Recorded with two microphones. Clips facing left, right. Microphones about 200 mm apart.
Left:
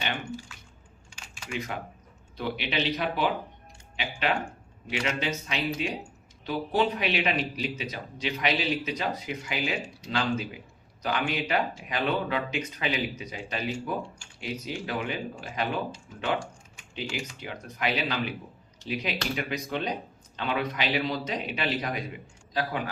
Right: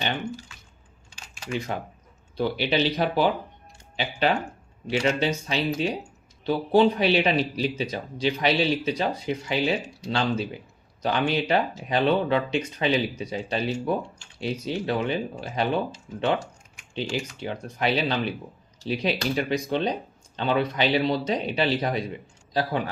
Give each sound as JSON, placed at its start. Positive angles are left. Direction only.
{"t": 1.5, "sound": "speech", "side_deg": -30}
{"t": 4.9, "sound": "speech", "side_deg": -35}
{"t": 16.9, "sound": "speech", "side_deg": -30}